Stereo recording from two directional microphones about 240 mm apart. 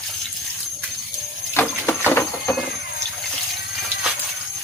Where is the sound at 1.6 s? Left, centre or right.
Centre.